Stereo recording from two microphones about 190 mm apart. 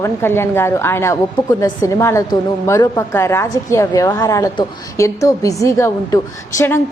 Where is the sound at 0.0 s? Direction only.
15° left (ahead or behind).